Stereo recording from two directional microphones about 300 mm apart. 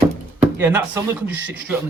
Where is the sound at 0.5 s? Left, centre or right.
Centre.